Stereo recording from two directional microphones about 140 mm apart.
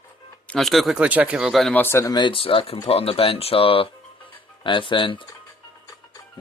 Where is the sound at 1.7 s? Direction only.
15° left (ahead or behind); by 5.2 s 35° left (ahead or behind).